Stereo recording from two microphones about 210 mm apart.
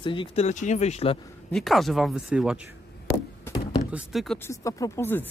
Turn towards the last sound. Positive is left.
turn(degrees=10)  # may be behind; listen again after turning